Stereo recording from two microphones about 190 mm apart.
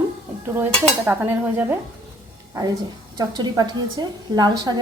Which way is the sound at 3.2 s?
20° right (ahead or behind).